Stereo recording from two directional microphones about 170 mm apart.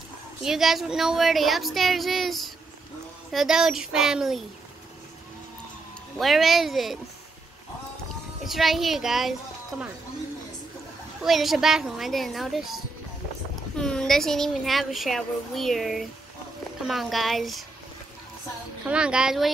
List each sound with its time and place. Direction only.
0.4 s speech: centre (ahead or behind)
6.1 s speech: centre (ahead or behind)
8.5 s speech: centre (ahead or behind)
11.2 s speech: centre (ahead or behind)
18.9 s speech: 5° right (ahead or behind)